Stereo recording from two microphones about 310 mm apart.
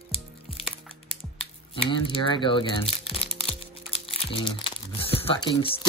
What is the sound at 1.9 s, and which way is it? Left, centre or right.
Speech, centre.